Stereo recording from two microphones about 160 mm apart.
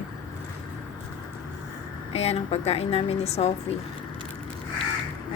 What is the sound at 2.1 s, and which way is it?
A woman's voice, 40° left (ahead or behind).